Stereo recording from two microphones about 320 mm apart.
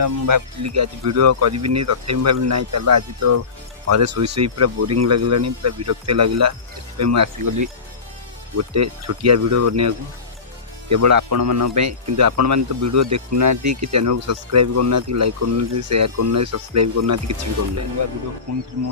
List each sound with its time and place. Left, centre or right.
0.0 s a man's voice: right
8.5 s a man's voice: right
18.5 s speech: right